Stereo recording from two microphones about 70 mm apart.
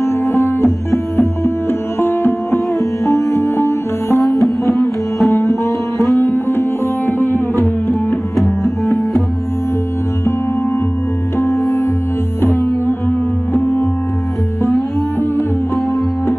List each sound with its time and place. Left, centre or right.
0.0 s music: left
2.8 s music: left
4.2 s music: centre
6.3 s sitar: left
8.1 s music: centre
11.3 s music: left
13.5 s music: left